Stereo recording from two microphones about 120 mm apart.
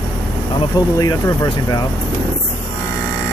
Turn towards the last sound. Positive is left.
turn(degrees=30)  # may be behind; listen again after turning